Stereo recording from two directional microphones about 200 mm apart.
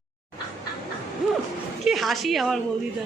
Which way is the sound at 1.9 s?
Centre (ahead or behind).